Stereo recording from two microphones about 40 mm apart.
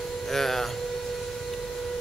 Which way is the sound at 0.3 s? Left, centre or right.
Centre.